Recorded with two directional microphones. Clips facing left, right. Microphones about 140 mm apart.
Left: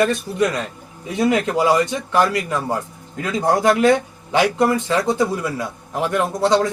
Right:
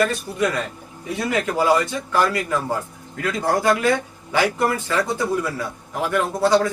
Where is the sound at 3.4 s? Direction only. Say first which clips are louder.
Left 4 dB; 20° left (ahead or behind).